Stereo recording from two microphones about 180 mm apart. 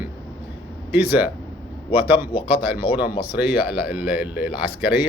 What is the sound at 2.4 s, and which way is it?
Speech, 10° right (ahead or behind).